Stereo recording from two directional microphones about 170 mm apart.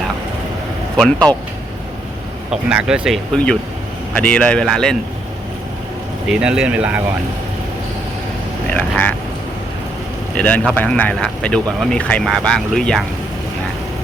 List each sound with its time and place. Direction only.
0.9 s speech: 5° left (ahead or behind)
2.5 s speech: 5° right (ahead or behind)
3.3 s speech: 5° left (ahead or behind)
6.2 s speech: 5° right (ahead or behind)
8.7 s speech: 10° left (ahead or behind)
10.3 s speech: 5° left (ahead or behind)